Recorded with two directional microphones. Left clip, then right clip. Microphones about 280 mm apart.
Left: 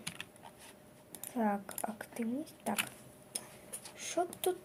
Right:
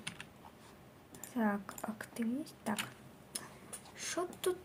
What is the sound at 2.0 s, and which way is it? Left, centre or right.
Speech, centre.